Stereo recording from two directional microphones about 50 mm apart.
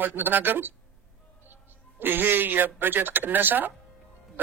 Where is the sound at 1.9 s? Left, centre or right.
Right.